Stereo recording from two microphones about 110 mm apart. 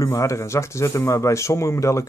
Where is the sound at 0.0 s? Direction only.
30° left (ahead or behind).